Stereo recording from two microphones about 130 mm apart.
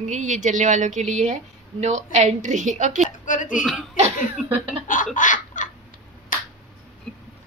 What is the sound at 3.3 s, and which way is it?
Speech, 85° left.